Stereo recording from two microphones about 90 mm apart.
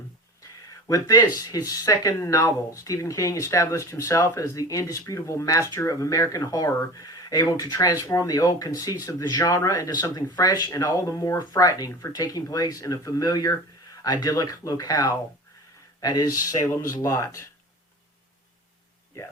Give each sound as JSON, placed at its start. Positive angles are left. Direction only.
{"t": 0.9, "sound": "speech", "side_deg": 40}